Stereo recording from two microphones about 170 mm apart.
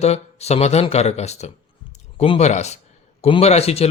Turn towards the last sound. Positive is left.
turn(degrees=35)  # may be behind; listen again after turning